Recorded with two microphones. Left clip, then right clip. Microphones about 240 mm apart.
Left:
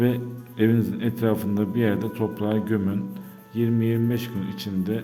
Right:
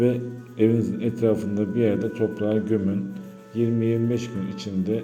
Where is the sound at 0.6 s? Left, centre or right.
Left.